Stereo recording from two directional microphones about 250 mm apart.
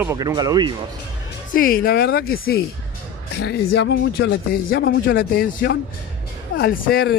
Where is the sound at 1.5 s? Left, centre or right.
Left.